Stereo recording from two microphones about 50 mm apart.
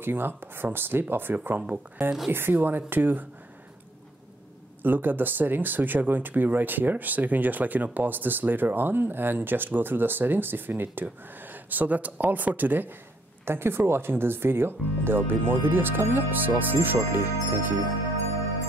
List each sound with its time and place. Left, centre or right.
0.0 s speech: right
4.8 s speech: right
13.5 s speech: right